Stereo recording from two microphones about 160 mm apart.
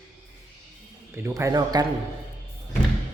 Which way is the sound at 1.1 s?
15° right (ahead or behind).